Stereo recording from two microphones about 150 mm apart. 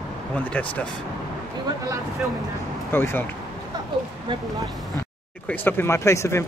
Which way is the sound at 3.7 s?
25° right (ahead or behind).